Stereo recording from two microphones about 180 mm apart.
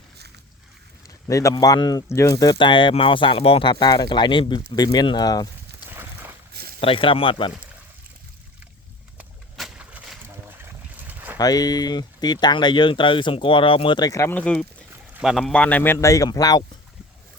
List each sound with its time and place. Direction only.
1.0 s speech: 15° left (ahead or behind)
5.9 s boat: 10° right (ahead or behind)
6.7 s speech: 30° left (ahead or behind)
9.1 s boat: 5° right (ahead or behind)
11.3 s speech: 20° left (ahead or behind)
15.1 s speech: centre (ahead or behind); by 16.6 s 20° left (ahead or behind)